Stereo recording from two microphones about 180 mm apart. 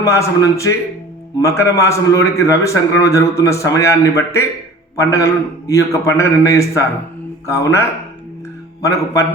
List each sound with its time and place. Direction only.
0.0 s a man's voice: 15° left (ahead or behind)